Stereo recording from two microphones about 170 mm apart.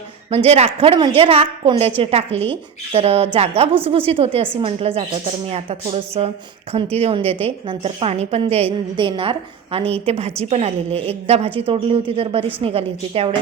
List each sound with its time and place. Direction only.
0.3 s a woman's voice: 40° right (ahead or behind)